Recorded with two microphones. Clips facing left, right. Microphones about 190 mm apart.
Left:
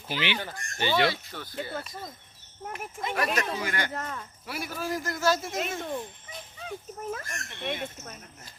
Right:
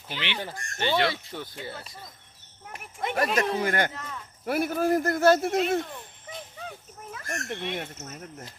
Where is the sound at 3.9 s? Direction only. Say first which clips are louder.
Left 4 dB; 50° left (ahead or behind).